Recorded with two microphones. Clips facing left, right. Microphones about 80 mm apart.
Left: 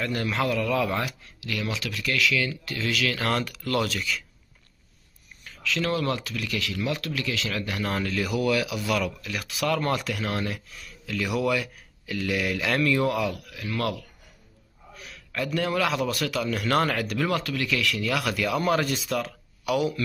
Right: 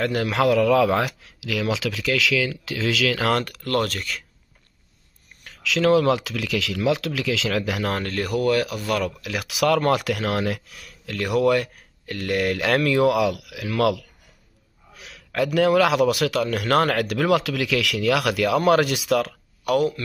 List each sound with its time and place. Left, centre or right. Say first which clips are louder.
0.0 s speech: right 6 dB; right
3.4 s speech: right 3 dB; right
5.4 s speech: right 7 dB; right
8.0 s speech: right 3 dB; right
9.2 s speech: right 6 dB; right
19.6 s speech: right 5 dB; right